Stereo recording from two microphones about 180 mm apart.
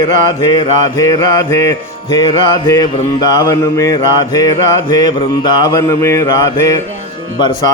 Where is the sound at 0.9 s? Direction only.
20° left (ahead or behind).